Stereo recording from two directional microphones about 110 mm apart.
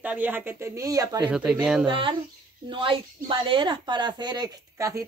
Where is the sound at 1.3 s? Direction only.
5° right (ahead or behind).